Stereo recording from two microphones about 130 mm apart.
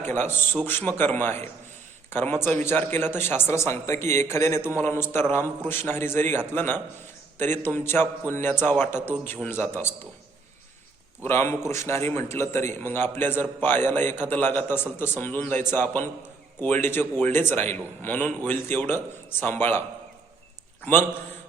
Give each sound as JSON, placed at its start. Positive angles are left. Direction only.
{"t": 0.0, "sound": "a man's voice", "side_deg": 15}
{"t": 11.2, "sound": "a man's voice", "side_deg": 20}
{"t": 20.8, "sound": "a man's voice", "side_deg": 15}